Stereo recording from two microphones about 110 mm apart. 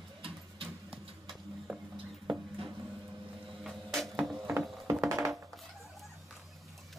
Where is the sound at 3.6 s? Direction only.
Centre (ahead or behind).